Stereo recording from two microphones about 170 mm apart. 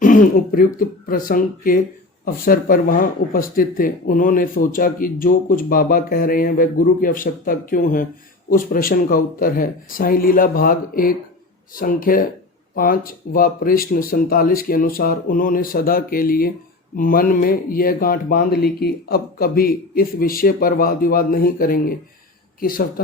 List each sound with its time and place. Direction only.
0.0 s speech: 55° left (ahead or behind)